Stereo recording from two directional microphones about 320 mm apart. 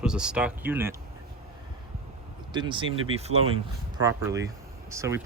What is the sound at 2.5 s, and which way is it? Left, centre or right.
Speech, centre.